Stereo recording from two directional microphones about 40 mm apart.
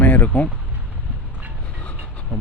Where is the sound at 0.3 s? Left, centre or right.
Left.